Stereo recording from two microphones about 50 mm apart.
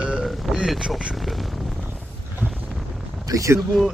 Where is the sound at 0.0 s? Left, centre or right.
Centre.